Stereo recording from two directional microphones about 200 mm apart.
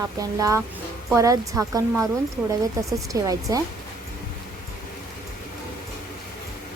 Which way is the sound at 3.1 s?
15° right (ahead or behind).